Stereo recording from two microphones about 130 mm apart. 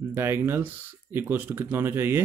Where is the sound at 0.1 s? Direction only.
20° right (ahead or behind).